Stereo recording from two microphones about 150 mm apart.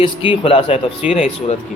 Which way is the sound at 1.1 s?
50° left (ahead or behind).